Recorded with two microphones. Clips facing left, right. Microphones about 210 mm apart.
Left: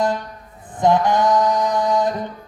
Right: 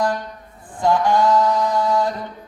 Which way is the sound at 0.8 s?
20° left (ahead or behind).